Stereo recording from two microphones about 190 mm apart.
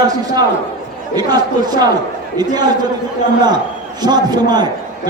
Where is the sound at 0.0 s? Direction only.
20° right (ahead or behind).